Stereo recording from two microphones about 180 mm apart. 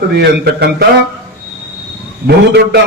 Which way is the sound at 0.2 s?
65° right (ahead or behind).